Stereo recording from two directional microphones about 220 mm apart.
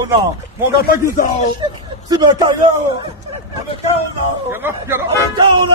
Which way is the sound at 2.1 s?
20° right (ahead or behind).